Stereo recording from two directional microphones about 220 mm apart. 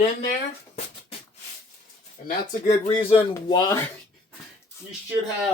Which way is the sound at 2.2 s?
35° left (ahead or behind).